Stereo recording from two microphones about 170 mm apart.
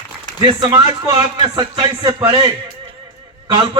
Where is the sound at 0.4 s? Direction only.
25° right (ahead or behind).